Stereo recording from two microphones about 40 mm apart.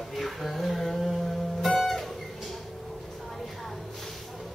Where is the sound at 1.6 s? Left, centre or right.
Centre.